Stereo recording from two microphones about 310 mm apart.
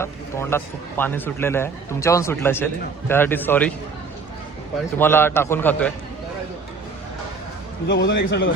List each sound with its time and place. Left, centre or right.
0.0 s a man's voice: centre
4.9 s a man's voice: centre
7.9 s a man's voice: left